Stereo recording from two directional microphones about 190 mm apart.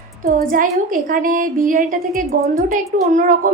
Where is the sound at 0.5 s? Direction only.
45° right (ahead or behind).